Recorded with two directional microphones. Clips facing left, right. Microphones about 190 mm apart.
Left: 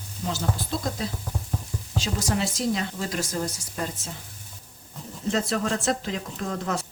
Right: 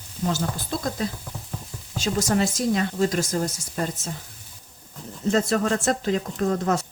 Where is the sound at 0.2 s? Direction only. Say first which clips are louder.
Right 5 dB; 45° right (ahead or behind).